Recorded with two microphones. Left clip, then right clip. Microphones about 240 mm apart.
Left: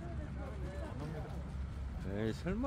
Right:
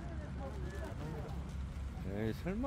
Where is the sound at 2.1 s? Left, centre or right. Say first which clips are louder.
Left 1 dB; centre.